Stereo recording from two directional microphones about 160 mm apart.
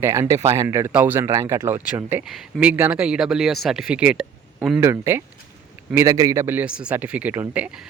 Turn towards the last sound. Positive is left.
turn(degrees=-10)  # may be behind; listen again after turning